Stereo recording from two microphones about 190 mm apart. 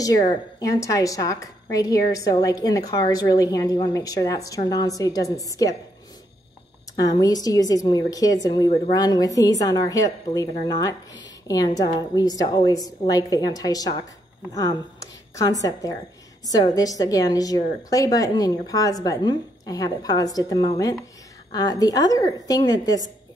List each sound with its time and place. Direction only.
0.3 s a woman's voice: 20° left (ahead or behind)
7.0 s a woman's voice: 20° left (ahead or behind)